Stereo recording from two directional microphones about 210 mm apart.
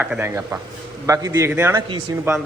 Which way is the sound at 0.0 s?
10° right (ahead or behind).